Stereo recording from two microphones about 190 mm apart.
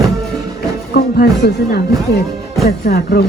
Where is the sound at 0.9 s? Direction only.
55° left (ahead or behind).